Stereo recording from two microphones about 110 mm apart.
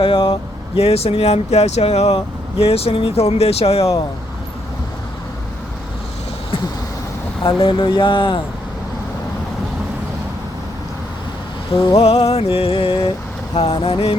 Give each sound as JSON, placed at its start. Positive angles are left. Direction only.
{"t": 0.0, "sound": "speech", "side_deg": 50}
{"t": 0.8, "sound": "speech", "side_deg": 65}
{"t": 7.4, "sound": "speech", "side_deg": 50}
{"t": 11.9, "sound": "speech", "side_deg": 70}
{"t": 13.5, "sound": "speech", "side_deg": 60}